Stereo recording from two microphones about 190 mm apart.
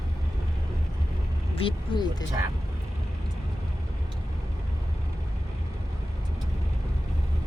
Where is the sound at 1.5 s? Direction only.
30° left (ahead or behind).